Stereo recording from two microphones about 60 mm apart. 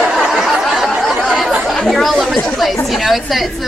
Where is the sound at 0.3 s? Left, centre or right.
Centre.